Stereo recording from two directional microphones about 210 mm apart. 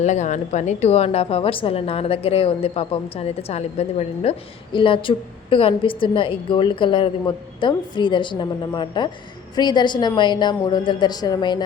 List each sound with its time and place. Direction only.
0.0 s a woman's voice: 35° left (ahead or behind)